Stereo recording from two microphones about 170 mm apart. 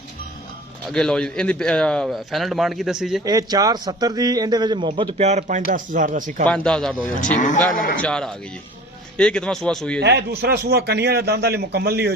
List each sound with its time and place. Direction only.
0.9 s a man's voice: 5° left (ahead or behind)
3.2 s a man's voice: 20° right (ahead or behind)
5.1 s speech: 40° right (ahead or behind)
6.4 s a man's voice: 5° left (ahead or behind)
7.2 s speech: 50° left (ahead or behind)
7.9 s a man's voice: 5° left (ahead or behind)
10.0 s a man's voice: 80° right